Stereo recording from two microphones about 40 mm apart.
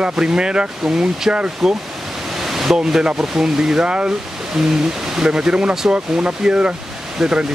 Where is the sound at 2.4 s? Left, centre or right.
Centre.